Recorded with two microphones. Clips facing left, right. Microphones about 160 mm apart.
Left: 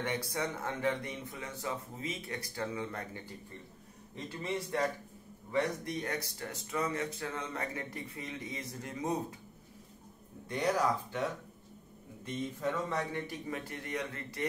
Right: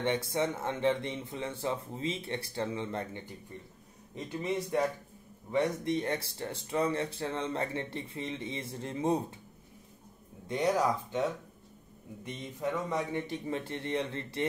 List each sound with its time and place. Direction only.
0.0 s speech: 25° right (ahead or behind)
12.4 s speech: 15° right (ahead or behind)